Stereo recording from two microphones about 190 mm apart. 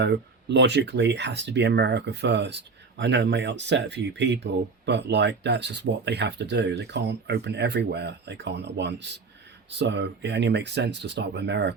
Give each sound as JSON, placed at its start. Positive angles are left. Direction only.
{"t": 0.0, "sound": "speech", "side_deg": -65}